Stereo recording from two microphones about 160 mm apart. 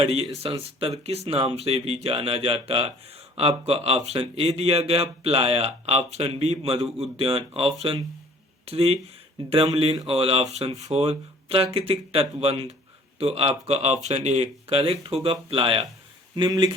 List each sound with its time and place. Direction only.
0.0 s speech: 35° right (ahead or behind)
10.1 s speech: 35° right (ahead or behind)